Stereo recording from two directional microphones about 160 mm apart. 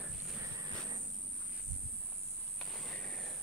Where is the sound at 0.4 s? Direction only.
20° right (ahead or behind).